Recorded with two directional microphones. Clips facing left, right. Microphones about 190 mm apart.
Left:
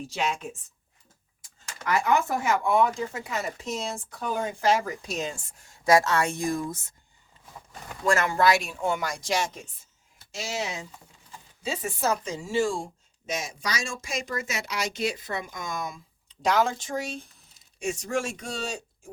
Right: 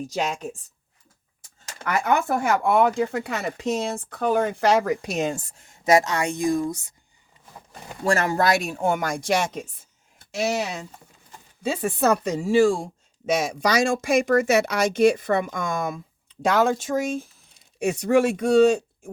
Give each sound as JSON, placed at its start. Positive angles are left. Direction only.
{"t": 0.1, "sound": "speech", "side_deg": -40}
{"t": 1.8, "sound": "speech", "side_deg": -55}
{"t": 5.6, "sound": "speech", "side_deg": -20}
{"t": 8.0, "sound": "speech", "side_deg": -35}
{"t": 17.2, "sound": "a sound", "side_deg": 0}
{"t": 17.7, "sound": "speech", "side_deg": -65}